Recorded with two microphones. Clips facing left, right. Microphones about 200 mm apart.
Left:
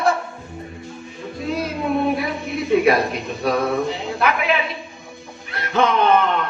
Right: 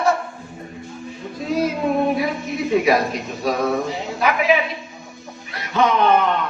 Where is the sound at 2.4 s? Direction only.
60° left (ahead or behind).